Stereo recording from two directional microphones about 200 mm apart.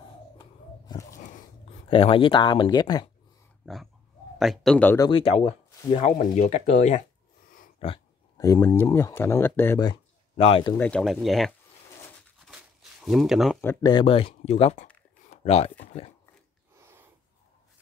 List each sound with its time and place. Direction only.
0.4 s a sound: 20° left (ahead or behind)
1.9 s speech: 25° left (ahead or behind)
3.6 s pig: centre (ahead or behind)
4.4 s speech: centre (ahead or behind); by 5.2 s 15° left (ahead or behind)
5.2 s speech: 30° left (ahead or behind)
8.4 s speech: 15° left (ahead or behind)
10.8 s speech: 5° left (ahead or behind)
13.0 s speech: centre (ahead or behind)
13.6 s speech: 10° left (ahead or behind)
13.9 s speech: 30° left (ahead or behind)
15.2 s a sound: 30° left (ahead or behind)
15.8 s speech: 30° left (ahead or behind)
16.7 s a sound: 10° right (ahead or behind)